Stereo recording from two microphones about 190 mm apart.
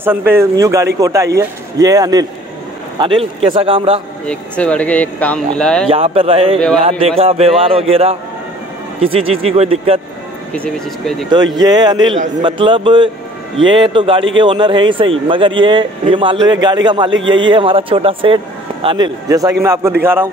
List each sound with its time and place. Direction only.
0.0 s a man's voice: 10° right (ahead or behind); by 4.0 s 30° right (ahead or behind)
4.3 s speech: 5° left (ahead or behind)
5.9 s speech: 30° right (ahead or behind)
10.5 s speech: 5° left (ahead or behind)
11.2 s speech: 20° right (ahead or behind)
17.1 s a man's voice: 85° right
17.5 s a man's voice: 25° right (ahead or behind); by 20.2 s 10° right (ahead or behind)